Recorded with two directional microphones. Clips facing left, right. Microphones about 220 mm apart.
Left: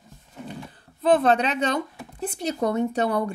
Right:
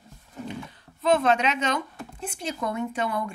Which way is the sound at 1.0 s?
35° left (ahead or behind).